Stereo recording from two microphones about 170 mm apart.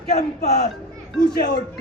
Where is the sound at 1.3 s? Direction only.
70° left (ahead or behind).